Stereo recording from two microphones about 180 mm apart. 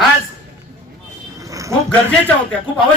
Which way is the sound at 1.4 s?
20° right (ahead or behind).